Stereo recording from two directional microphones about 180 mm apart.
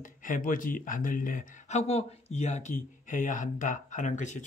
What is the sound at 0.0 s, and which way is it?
Speech, 45° left (ahead or behind).